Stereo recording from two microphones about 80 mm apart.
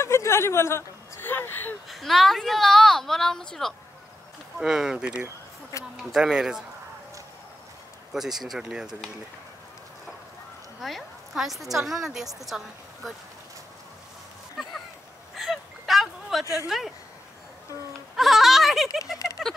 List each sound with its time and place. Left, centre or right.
0.0 s a sound: left
1.9 s a woman's voice: centre
4.6 s speech: centre
8.1 s a woman's voice: centre
10.8 s a woman's voice: centre
14.6 s a woman's voice: centre
15.3 s a sound: centre
16.6 s a woman's voice: centre
18.1 s a woman's voice: centre